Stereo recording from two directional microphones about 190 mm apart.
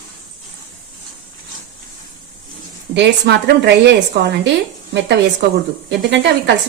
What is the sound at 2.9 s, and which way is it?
Speech, 65° right (ahead or behind).